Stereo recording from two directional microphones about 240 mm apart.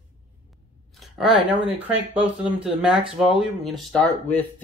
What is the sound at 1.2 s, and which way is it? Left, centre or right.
Speech, centre.